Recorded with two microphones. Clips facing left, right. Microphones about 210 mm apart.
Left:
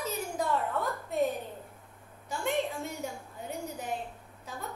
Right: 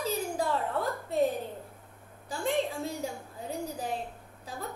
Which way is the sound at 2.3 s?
35° right (ahead or behind).